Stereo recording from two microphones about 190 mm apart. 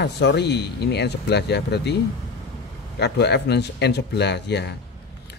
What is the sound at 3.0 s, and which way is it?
Speech, 60° left (ahead or behind).